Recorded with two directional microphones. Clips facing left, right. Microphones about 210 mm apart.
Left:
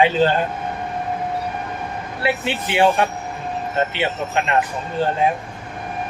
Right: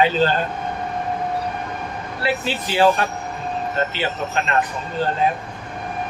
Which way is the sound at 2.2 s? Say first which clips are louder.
Left 1 dB; 20° left (ahead or behind).